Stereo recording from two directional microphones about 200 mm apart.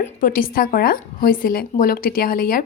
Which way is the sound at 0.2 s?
45° left (ahead or behind).